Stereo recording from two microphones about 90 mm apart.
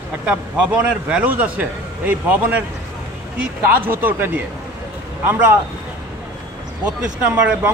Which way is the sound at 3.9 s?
20° right (ahead or behind).